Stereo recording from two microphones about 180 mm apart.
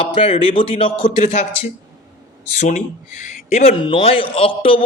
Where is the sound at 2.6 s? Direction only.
45° left (ahead or behind).